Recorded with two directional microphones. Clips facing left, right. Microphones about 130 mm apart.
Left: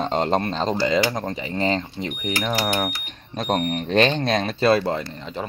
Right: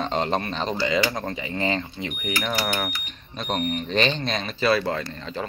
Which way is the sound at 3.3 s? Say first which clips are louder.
Left 3 dB; 45° left (ahead or behind).